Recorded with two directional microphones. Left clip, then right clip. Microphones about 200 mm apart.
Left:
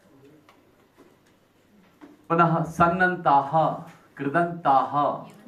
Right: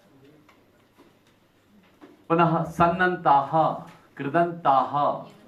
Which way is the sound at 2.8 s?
30° right (ahead or behind).